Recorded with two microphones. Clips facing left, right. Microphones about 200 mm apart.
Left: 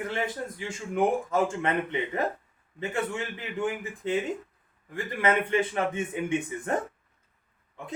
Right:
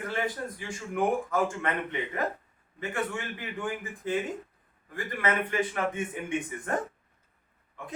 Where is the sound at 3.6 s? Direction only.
25° left (ahead or behind).